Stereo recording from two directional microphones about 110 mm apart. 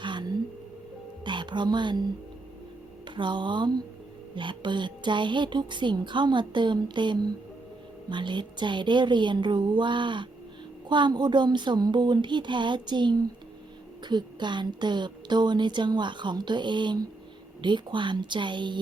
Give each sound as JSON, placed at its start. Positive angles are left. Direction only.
{"t": 0.0, "sound": "a sound", "side_deg": -45}
{"t": 1.2, "sound": "speech", "side_deg": -45}
{"t": 3.2, "sound": "a woman's voice", "side_deg": -45}